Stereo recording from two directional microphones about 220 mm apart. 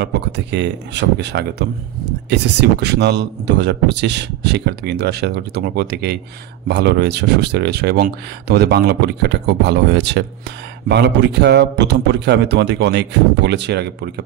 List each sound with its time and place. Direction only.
0.0 s speech: 50° right (ahead or behind)